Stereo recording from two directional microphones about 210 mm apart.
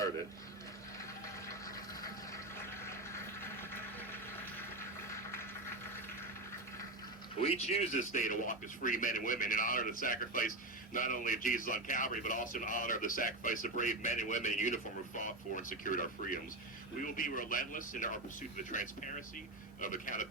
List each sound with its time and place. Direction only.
1.5 s water: 15° left (ahead or behind)
5.0 s a sound: 15° left (ahead or behind)
7.4 s a man's voice: 30° left (ahead or behind)